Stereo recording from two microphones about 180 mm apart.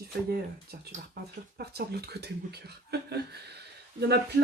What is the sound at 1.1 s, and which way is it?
Speech, 60° right (ahead or behind).